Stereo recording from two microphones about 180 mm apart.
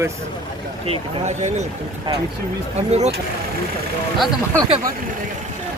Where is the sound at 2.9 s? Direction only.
35° right (ahead or behind).